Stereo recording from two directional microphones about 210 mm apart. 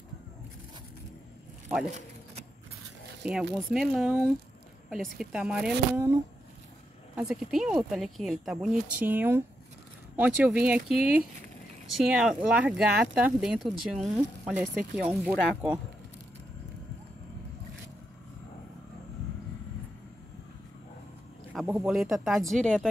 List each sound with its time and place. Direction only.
1.9 s a sound: 35° right (ahead or behind)
3.5 s speech: centre (ahead or behind)
7.2 s speech: centre (ahead or behind)
21.7 s speech: centre (ahead or behind)